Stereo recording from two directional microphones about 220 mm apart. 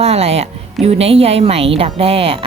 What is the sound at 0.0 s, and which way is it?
A woman's voice, 30° right (ahead or behind).